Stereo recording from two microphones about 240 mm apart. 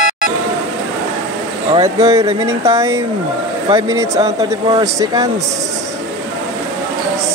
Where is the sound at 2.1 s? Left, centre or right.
Centre.